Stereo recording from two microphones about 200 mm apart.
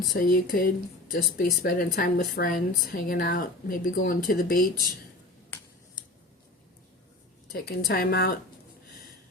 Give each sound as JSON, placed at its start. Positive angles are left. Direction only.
{"t": 0.2, "sound": "a woman's voice", "side_deg": 45}
{"t": 7.5, "sound": "a woman's voice", "side_deg": 50}